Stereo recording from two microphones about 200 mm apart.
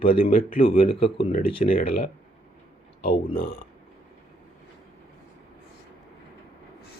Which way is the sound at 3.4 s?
50° left (ahead or behind).